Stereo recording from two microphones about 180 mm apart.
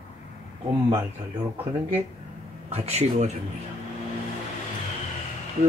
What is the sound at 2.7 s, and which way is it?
Speech, 35° right (ahead or behind).